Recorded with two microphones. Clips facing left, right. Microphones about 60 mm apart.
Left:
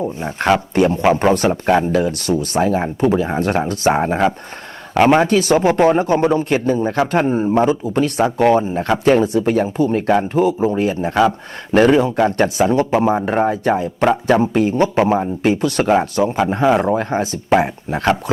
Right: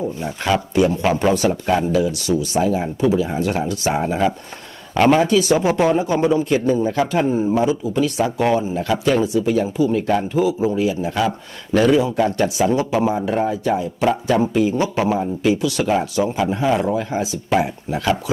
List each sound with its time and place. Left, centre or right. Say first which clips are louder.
0.2 s speech: left 6 dB; left
1.5 s speech: left 3 dB; left